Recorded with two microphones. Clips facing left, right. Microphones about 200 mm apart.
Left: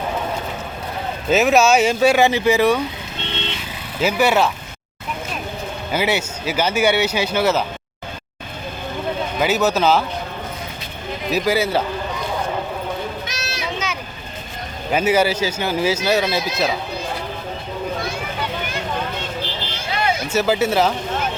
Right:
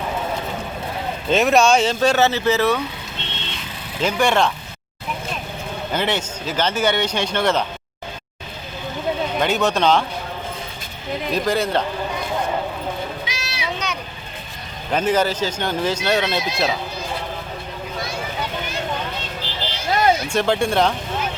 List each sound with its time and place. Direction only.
1.3 s speech: 5° left (ahead or behind)
4.0 s speech: 5° left (ahead or behind)
5.9 s speech: 10° left (ahead or behind)
9.4 s speech: 5° left (ahead or behind)
11.3 s speech: 5° left (ahead or behind)
13.2 s a sound: 45° left (ahead or behind)
13.7 s a sound: centre (ahead or behind)
14.9 s speech: 10° left (ahead or behind)
19.9 s a sound: 45° right (ahead or behind)
20.2 s speech: 5° left (ahead or behind)